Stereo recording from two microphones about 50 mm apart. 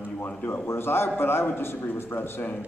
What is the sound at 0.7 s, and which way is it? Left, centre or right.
A man's voice, left.